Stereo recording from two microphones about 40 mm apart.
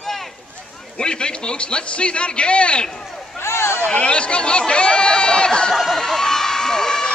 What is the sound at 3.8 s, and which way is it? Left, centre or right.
A man's voice, left.